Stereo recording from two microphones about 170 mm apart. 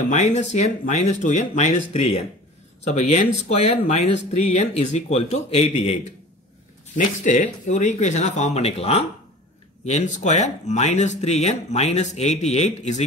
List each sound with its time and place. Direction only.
0.0 s speech: 45° left (ahead or behind)
7.0 s speech: 45° left (ahead or behind)